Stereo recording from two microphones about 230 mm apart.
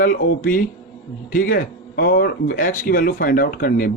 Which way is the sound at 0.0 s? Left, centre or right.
Left.